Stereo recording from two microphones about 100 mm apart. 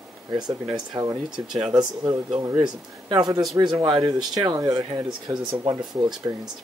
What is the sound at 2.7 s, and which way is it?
Speech, 45° right (ahead or behind).